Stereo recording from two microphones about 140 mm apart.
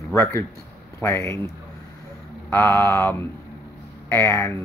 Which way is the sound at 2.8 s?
15° left (ahead or behind).